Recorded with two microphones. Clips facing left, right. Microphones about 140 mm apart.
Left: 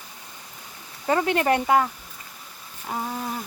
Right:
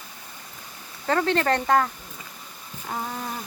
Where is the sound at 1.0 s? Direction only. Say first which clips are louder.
Left 1 dB; 15° left (ahead or behind).